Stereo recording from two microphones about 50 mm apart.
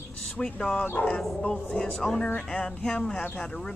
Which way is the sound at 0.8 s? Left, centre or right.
Left.